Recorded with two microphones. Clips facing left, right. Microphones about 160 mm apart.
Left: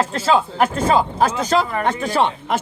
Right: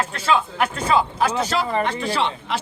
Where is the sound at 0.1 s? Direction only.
40° left (ahead or behind).